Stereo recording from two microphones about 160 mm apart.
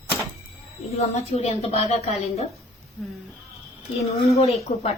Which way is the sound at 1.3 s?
40° left (ahead or behind).